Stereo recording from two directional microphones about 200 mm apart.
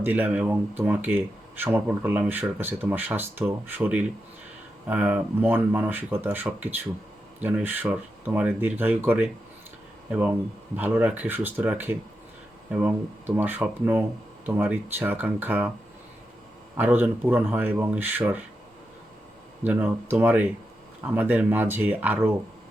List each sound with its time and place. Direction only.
0.0 s speech: 10° right (ahead or behind)
16.7 s speech: 10° right (ahead or behind)
19.6 s speech: 10° right (ahead or behind)